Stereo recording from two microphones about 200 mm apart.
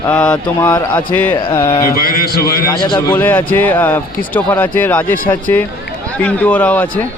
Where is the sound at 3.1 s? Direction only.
10° left (ahead or behind).